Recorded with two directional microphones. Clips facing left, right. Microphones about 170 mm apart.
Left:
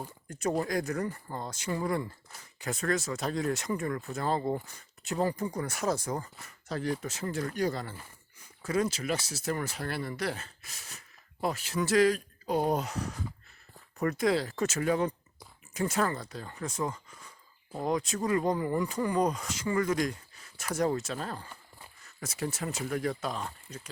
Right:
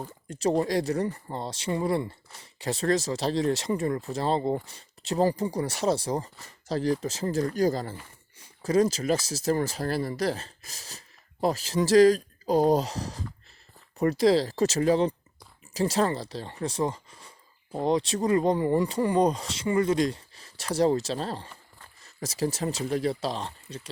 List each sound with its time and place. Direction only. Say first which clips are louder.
0.4 s speech: right 5 dB; 30° right (ahead or behind)